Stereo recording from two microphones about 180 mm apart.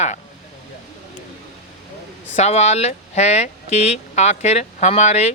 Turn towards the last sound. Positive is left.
turn(degrees=35)  # may be behind; listen again after turning